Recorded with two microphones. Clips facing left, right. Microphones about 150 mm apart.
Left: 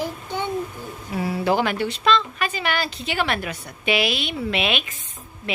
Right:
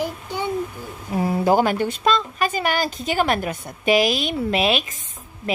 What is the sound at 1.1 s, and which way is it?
A woman's voice, 45° right (ahead or behind).